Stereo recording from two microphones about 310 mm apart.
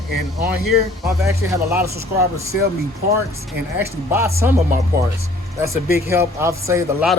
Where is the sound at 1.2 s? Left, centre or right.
Centre.